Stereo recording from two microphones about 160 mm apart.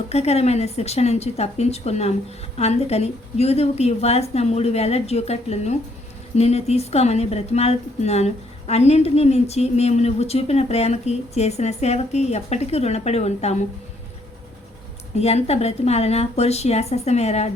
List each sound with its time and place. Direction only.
0.1 s a woman's voice: 40° left (ahead or behind)
15.1 s a woman's voice: 40° left (ahead or behind)